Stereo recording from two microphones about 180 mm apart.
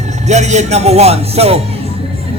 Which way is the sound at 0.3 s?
40° right (ahead or behind).